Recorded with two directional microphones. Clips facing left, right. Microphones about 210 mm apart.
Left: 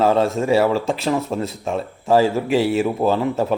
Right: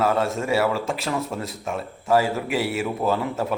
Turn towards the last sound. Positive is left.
turn(degrees=30)  # may be behind; listen again after turning